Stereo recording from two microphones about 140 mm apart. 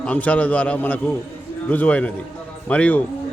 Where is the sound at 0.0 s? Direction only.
10° left (ahead or behind).